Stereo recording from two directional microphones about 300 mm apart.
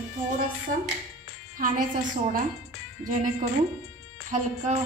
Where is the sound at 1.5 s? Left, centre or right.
Right.